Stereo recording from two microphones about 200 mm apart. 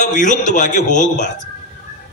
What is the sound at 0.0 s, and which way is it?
A man's voice, 40° left (ahead or behind).